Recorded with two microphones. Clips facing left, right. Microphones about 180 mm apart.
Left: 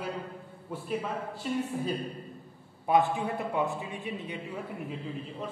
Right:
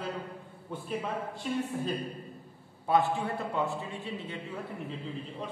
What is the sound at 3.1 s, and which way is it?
Speech, 15° left (ahead or behind).